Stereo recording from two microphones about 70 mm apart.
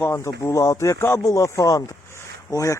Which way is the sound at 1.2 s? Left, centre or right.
Left.